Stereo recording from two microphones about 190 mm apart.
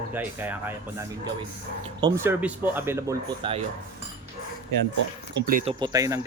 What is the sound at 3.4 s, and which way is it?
Speech, 25° right (ahead or behind).